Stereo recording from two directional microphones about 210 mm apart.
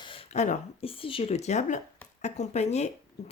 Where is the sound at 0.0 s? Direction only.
25° left (ahead or behind).